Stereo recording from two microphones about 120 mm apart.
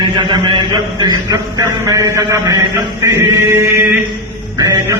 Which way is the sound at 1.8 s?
30° right (ahead or behind).